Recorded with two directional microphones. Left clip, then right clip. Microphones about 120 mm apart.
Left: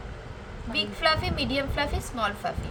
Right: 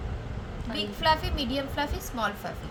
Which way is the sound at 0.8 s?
30° left (ahead or behind).